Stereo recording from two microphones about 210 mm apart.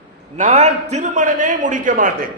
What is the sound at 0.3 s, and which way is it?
A man's voice, 30° right (ahead or behind).